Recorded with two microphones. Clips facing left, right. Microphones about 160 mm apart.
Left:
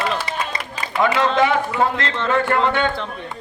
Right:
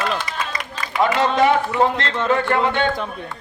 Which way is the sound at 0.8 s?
30° left (ahead or behind).